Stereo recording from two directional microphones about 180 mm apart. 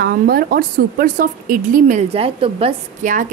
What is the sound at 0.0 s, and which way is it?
A woman's voice, 60° right (ahead or behind).